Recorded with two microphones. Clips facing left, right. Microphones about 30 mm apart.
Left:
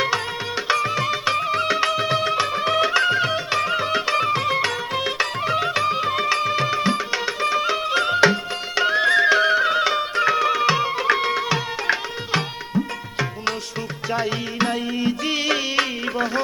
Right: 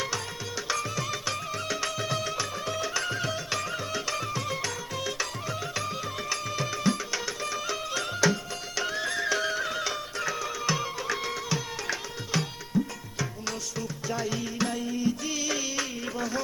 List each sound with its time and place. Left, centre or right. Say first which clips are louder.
0.7 s music: left 10 dB; left